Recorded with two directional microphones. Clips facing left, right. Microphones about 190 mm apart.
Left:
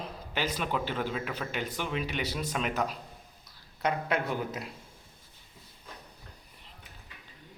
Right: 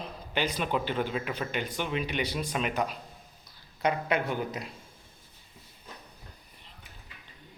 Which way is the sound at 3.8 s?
Centre (ahead or behind).